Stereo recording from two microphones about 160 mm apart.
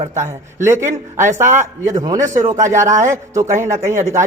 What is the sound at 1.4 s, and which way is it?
A man's voice, 50° right (ahead or behind).